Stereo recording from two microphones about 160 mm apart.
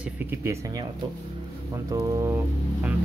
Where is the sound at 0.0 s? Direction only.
15° right (ahead or behind).